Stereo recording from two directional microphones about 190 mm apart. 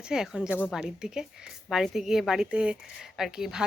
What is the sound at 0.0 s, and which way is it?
A woman's voice, 5° right (ahead or behind).